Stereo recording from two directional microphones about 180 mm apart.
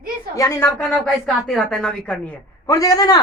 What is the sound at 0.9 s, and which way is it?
Speech, 5° left (ahead or behind).